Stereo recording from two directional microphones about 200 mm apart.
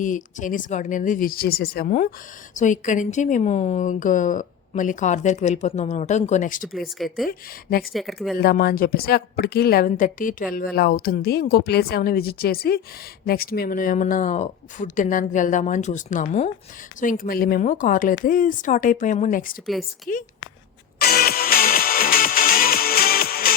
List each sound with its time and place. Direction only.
0.0 s a woman's voice: 40° left (ahead or behind)
6.7 s speech: centre (ahead or behind)
7.3 s a woman's voice: 50° left (ahead or behind)
7.9 s speech: centre (ahead or behind)
8.4 s a woman's voice: 50° left (ahead or behind)
21.0 s music: 50° left (ahead or behind)